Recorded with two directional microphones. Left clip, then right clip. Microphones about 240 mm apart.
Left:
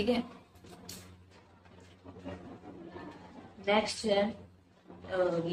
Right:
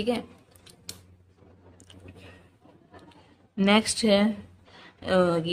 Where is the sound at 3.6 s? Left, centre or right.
Right.